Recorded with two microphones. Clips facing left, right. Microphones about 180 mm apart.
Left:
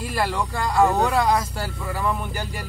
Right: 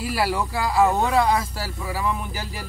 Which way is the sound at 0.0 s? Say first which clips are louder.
Right 1 dB; 5° right (ahead or behind).